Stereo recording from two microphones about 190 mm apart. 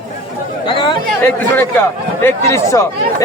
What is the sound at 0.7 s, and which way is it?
Chatter, 25° left (ahead or behind).